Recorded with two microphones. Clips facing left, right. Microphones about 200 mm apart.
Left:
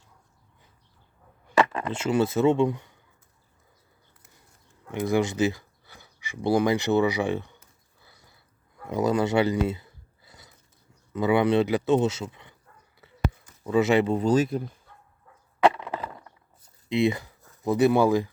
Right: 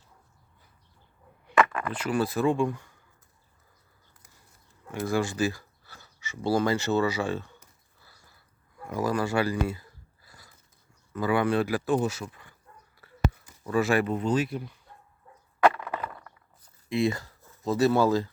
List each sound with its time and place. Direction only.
1.5 s speech: 30° left (ahead or behind)
4.9 s speech: 20° left (ahead or behind)
8.0 s a sound: 20° left (ahead or behind)
11.1 s speech: 20° left (ahead or behind)
13.0 s a sound: 20° left (ahead or behind)
13.7 s speech: 20° left (ahead or behind); by 14.8 s 45° left (ahead or behind)
15.6 s wood: 20° left (ahead or behind)
16.9 s speech: 15° left (ahead or behind)